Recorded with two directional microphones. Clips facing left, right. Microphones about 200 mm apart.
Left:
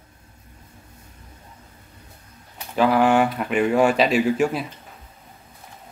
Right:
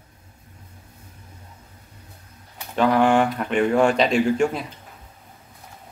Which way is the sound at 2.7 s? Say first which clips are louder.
Even; 5° left (ahead or behind).